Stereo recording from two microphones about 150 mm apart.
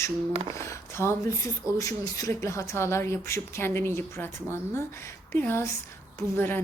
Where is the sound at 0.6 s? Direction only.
20° left (ahead or behind).